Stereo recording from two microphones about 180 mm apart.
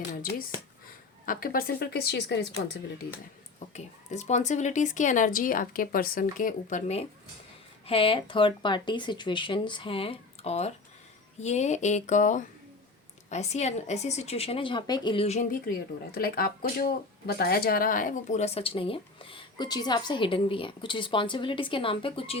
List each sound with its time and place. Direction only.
1.2 s speech: 50° left (ahead or behind)
3.7 s speech: 40° left (ahead or behind)
7.9 s speech: 30° left (ahead or behind)
16.1 s speech: 55° left (ahead or behind); by 22.4 s 30° left (ahead or behind)